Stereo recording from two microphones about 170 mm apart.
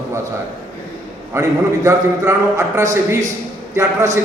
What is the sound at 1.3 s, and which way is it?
A man's voice, 15° right (ahead or behind).